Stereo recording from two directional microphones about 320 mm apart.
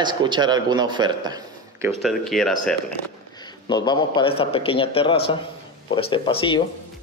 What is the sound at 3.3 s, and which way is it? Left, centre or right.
A man's voice, centre.